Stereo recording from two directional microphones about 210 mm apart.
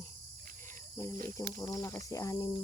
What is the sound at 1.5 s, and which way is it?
Cricket, 15° left (ahead or behind).